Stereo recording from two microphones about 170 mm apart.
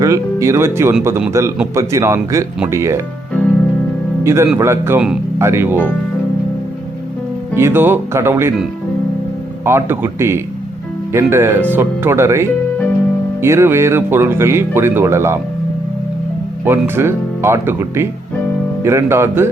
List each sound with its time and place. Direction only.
0.0 s speech: 15° right (ahead or behind)
4.2 s speech: 15° right (ahead or behind)
7.5 s speech: 15° right (ahead or behind)
9.6 s speech: 15° right (ahead or behind)
16.6 s speech: 15° right (ahead or behind)